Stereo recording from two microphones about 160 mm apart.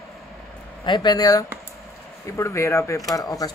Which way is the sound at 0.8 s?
25° left (ahead or behind).